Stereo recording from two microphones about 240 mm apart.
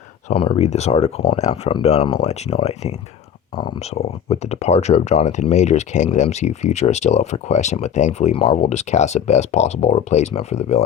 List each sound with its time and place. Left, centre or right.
0.3 s speech: left